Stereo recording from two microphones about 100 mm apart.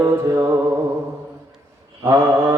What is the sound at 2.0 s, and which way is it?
Music, 30° right (ahead or behind).